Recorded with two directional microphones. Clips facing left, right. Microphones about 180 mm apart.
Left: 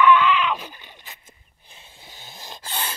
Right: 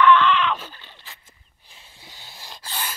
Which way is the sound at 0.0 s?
10° left (ahead or behind).